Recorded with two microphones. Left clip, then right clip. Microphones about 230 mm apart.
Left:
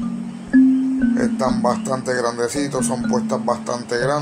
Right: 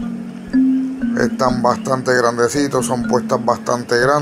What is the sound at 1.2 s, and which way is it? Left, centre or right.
Speech, centre.